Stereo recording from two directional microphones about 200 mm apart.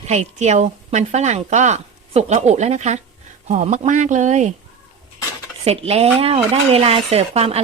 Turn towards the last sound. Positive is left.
turn(degrees=-30)  # may be behind; listen again after turning